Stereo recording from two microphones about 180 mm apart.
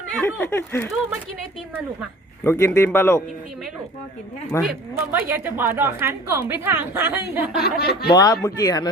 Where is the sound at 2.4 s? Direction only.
15° left (ahead or behind).